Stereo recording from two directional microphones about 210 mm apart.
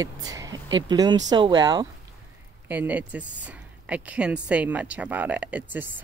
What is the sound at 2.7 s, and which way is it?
Speech, 5° right (ahead or behind).